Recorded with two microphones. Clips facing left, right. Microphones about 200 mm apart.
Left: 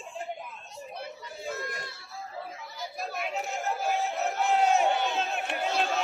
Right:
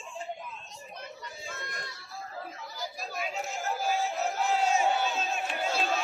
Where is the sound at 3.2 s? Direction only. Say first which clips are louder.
Left 1 dB; 60° left (ahead or behind).